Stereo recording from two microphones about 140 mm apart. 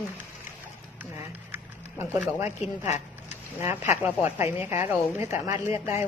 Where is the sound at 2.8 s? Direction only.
55° left (ahead or behind).